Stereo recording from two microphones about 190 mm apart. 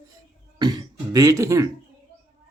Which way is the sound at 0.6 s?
20° right (ahead or behind).